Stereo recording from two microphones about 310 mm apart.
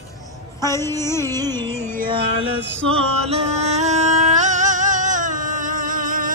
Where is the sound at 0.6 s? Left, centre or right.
Centre.